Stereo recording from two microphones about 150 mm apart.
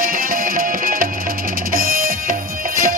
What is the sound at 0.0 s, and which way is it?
Music, 75° right (ahead or behind).